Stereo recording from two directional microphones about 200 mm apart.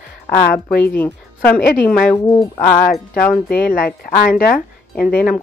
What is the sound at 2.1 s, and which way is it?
Speech, 20° left (ahead or behind).